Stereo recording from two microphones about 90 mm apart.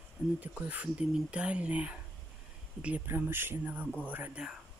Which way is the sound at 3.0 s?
25° right (ahead or behind).